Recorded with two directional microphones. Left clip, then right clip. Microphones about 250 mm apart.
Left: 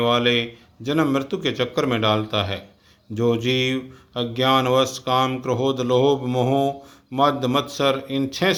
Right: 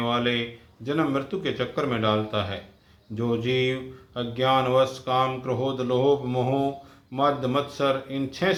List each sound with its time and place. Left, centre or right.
0.0 s speech: left